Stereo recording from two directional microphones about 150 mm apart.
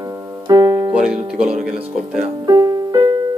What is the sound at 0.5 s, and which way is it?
Piano, 25° right (ahead or behind).